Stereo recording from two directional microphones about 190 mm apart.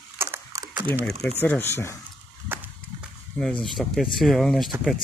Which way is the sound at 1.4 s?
10° left (ahead or behind).